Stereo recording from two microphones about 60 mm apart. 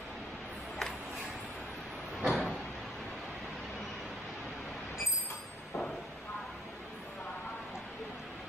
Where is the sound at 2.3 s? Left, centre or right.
Centre.